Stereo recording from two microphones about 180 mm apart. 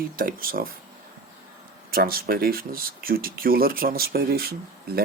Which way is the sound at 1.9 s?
55° right (ahead or behind).